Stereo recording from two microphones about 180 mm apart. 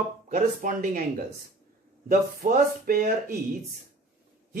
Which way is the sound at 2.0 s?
55° right (ahead or behind).